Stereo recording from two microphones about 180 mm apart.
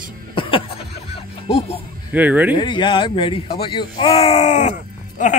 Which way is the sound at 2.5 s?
25° left (ahead or behind).